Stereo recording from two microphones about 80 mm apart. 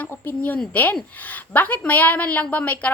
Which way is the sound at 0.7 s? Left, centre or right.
Left.